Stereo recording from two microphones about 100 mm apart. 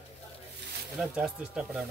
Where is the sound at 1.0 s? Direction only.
5° right (ahead or behind).